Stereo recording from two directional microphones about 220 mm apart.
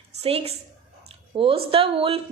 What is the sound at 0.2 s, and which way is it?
A woman's voice, 25° right (ahead or behind).